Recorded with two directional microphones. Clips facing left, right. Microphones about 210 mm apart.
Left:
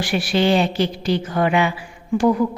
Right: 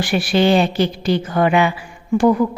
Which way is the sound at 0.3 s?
55° right (ahead or behind).